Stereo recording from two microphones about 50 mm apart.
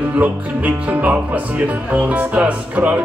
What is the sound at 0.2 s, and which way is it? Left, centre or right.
Music, right.